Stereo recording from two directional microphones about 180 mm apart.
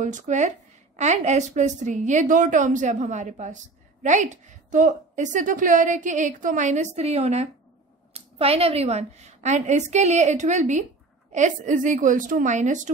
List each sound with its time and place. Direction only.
0.0 s a woman's voice: 40° right (ahead or behind)